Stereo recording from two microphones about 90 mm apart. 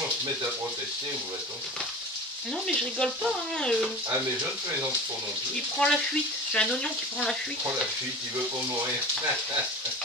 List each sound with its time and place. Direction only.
2.6 s speech: 10° left (ahead or behind)
5.7 s speech: 10° left (ahead or behind)